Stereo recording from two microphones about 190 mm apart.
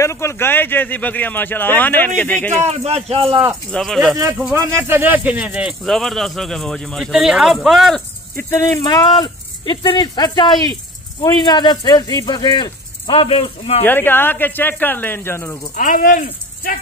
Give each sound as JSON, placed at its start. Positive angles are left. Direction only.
{"t": 0.0, "sound": "speech", "side_deg": 15}
{"t": 2.6, "sound": "a man's voice", "side_deg": -35}
{"t": 3.7, "sound": "speech", "side_deg": 0}
{"t": 4.2, "sound": "speech", "side_deg": -15}
{"t": 8.4, "sound": "speech", "side_deg": 15}
{"t": 13.8, "sound": "speech", "side_deg": 10}
{"t": 15.7, "sound": "speech", "side_deg": 45}